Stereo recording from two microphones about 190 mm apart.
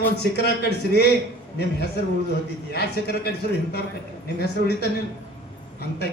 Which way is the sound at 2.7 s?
55° left (ahead or behind).